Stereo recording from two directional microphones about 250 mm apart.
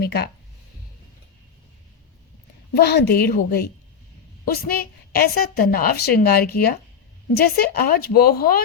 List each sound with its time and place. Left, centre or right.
0.0 s a woman's voice: left
2.7 s a woman's voice: left